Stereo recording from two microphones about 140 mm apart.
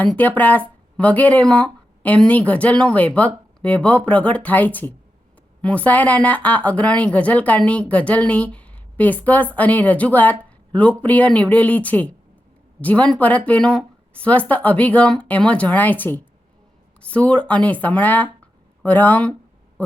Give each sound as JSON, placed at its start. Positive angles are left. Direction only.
{"t": 0.0, "sound": "speech", "side_deg": 10}